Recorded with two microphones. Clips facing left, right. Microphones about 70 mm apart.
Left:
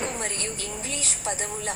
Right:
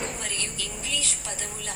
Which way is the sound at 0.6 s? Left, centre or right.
Left.